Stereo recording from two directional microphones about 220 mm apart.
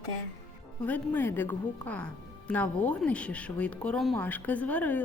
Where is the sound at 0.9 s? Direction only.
10° left (ahead or behind).